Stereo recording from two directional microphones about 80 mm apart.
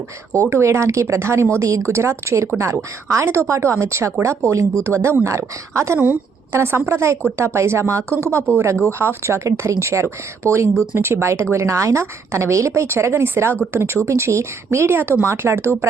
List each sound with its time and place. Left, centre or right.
0.5 s speech: right